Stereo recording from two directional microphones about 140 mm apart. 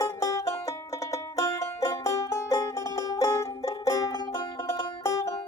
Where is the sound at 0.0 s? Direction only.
25° left (ahead or behind).